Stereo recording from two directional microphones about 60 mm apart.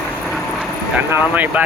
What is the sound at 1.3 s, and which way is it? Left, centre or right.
Speech, right.